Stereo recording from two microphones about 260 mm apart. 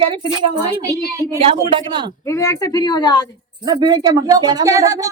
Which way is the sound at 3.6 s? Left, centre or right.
Centre.